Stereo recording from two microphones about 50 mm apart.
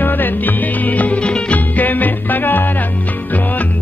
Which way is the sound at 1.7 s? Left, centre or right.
Left.